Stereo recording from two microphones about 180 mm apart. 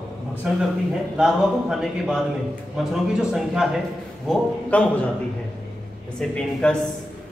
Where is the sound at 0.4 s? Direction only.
5° right (ahead or behind).